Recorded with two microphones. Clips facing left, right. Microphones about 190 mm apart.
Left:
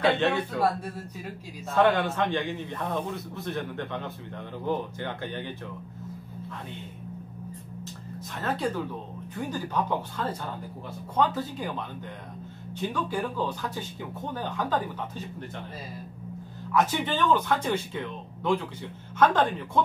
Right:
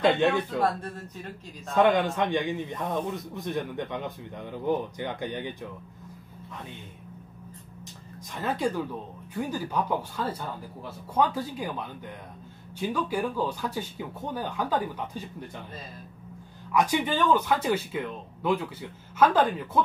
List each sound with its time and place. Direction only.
0.6 s speech: 10° left (ahead or behind)
1.8 s a man's voice: 15° right (ahead or behind)
8.4 s a man's voice: 10° right (ahead or behind)
12.7 s a man's voice: 10° right (ahead or behind)
16.7 s a man's voice: 10° right (ahead or behind)